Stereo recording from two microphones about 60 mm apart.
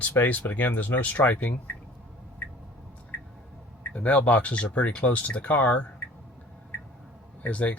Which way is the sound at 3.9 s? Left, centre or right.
Left.